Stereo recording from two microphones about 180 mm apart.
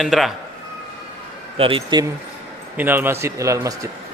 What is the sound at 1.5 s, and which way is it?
Speech, 30° right (ahead or behind).